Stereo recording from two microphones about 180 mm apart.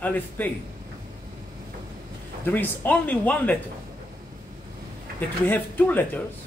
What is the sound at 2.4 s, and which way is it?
Speech, 10° left (ahead or behind).